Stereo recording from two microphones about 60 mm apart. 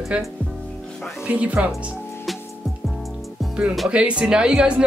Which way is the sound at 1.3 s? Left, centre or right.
Right.